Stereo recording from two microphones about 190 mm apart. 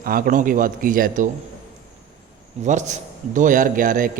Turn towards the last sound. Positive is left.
turn(degrees=-45)  # may be behind; listen again after turning